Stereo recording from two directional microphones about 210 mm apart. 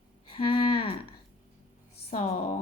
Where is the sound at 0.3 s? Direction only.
25° left (ahead or behind).